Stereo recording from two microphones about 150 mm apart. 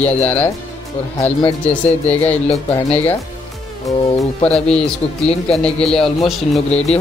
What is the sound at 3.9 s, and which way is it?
Speech, centre (ahead or behind).